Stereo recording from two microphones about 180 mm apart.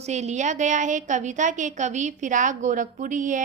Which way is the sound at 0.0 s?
40° right (ahead or behind).